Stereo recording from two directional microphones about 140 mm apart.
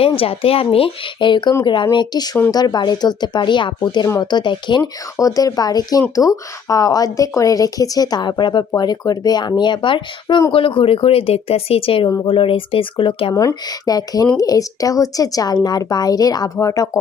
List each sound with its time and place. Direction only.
0.0 s speech: 45° left (ahead or behind)
12.0 s speech: 25° left (ahead or behind)
12.3 s speech: 40° left (ahead or behind)
13.3 s speech: 20° left (ahead or behind)